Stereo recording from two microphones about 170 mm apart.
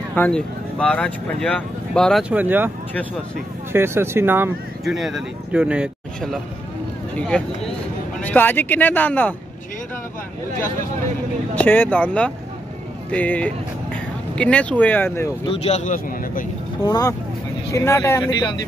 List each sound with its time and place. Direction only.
0.1 s speech: 5° left (ahead or behind)
2.2 s speech: 10° right (ahead or behind)
3.7 s speech: 15° right (ahead or behind)
4.8 s speech: centre (ahead or behind)
7.2 s speech: 5° left (ahead or behind)
11.5 s speech: 10° left (ahead or behind)
15.4 s speech: 35° left (ahead or behind); by 16.4 s 50° left (ahead or behind)
16.8 s speech: 20° left (ahead or behind)
18.3 s speech: 25° left (ahead or behind)